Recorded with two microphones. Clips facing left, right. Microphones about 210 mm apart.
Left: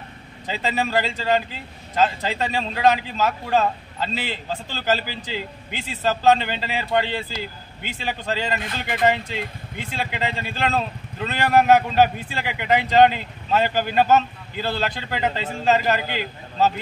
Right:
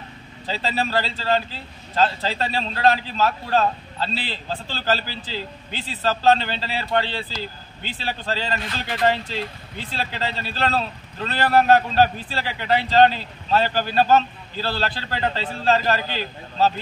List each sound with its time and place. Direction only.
0.5 s speech: 15° left (ahead or behind)